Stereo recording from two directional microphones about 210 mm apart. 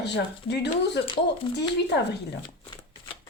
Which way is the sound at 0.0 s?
55° left (ahead or behind).